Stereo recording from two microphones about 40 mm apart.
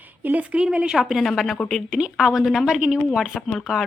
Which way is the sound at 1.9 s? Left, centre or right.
Centre.